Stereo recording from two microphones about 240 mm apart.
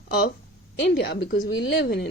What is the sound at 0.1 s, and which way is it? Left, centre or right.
A woman's voice, left.